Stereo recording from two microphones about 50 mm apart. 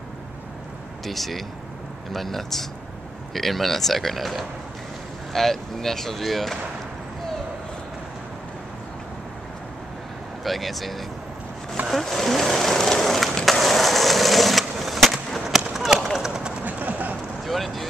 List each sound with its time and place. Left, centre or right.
1.0 s speech: centre
10.4 s speech: centre
11.9 s vehicle: centre
13.5 s skateboard: centre
15.7 s a sound: centre
16.6 s a sound: right
17.5 s vehicle: centre